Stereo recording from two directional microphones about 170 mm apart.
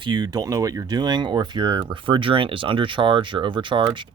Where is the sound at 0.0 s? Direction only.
25° right (ahead or behind).